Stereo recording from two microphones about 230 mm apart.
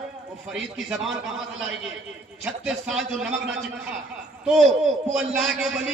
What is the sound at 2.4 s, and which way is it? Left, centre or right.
Speech, centre.